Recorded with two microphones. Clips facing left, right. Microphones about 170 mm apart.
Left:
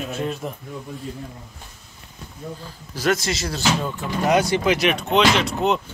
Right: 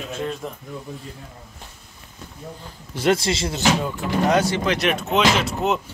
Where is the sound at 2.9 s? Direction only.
25° right (ahead or behind).